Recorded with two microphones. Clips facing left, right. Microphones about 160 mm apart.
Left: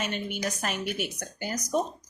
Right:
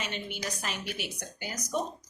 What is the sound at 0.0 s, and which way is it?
A woman's voice, 50° left (ahead or behind).